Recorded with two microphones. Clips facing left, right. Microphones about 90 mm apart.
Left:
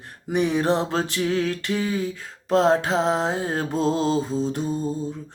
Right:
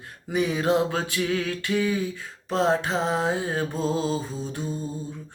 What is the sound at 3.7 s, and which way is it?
Mantra, 70° left (ahead or behind).